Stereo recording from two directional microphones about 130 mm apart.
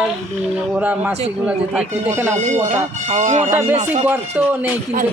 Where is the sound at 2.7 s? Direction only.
60° right (ahead or behind).